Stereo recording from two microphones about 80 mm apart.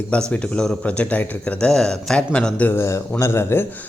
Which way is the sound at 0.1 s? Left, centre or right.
Centre.